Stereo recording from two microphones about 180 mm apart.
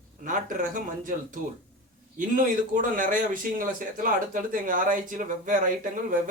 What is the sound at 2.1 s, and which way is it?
Speech, 45° right (ahead or behind).